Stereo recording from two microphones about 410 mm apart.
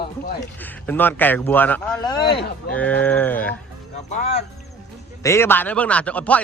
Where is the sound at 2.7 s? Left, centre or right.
Centre.